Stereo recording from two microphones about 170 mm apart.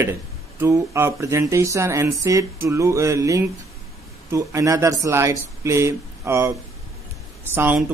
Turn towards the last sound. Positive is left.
turn(degrees=-10)  # may be behind; listen again after turning